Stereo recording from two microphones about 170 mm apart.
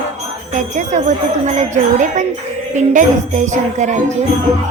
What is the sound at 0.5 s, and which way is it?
Speech, 45° right (ahead or behind).